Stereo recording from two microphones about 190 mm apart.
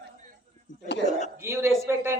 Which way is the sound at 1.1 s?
40° left (ahead or behind).